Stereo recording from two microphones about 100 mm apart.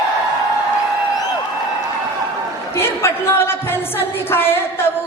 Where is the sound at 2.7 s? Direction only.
25° left (ahead or behind).